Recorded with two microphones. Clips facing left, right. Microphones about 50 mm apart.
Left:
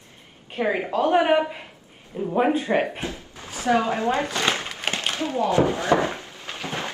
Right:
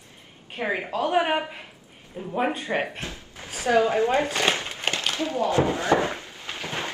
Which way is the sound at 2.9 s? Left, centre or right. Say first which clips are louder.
Left 4 dB; left.